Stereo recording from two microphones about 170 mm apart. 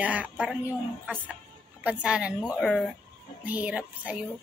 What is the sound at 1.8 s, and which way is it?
A woman's voice, 5° right (ahead or behind).